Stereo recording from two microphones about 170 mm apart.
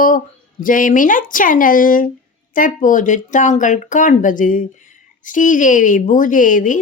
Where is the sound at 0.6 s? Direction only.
50° left (ahead or behind).